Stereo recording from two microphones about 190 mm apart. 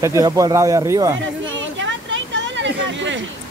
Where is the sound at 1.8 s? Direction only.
75° right (ahead or behind).